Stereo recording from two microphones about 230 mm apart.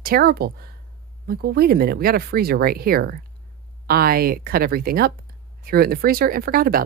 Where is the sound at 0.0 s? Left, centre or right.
Right.